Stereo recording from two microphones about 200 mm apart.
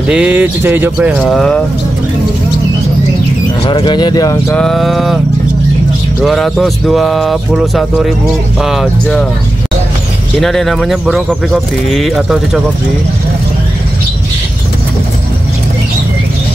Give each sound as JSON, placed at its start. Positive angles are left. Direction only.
{"t": 0.1, "sound": "speech", "side_deg": -5}
{"t": 3.6, "sound": "speech", "side_deg": 25}
{"t": 4.6, "sound": "speech", "side_deg": 0}
{"t": 6.2, "sound": "speech", "side_deg": 0}
{"t": 10.4, "sound": "speech", "side_deg": 0}